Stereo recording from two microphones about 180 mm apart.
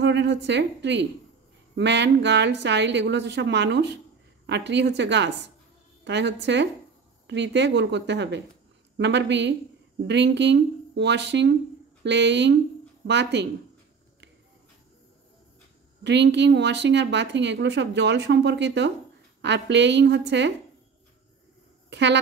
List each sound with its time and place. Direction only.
0.0 s a woman's voice: 75° right (ahead or behind)
16.0 s speech: 75° right (ahead or behind)
21.9 s speech: 75° right (ahead or behind)